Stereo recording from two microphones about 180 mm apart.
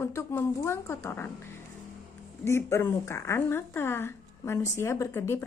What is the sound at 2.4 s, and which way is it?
A woman's voice, 15° left (ahead or behind).